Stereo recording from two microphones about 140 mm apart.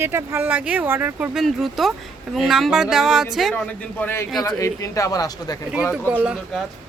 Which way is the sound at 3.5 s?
10° left (ahead or behind).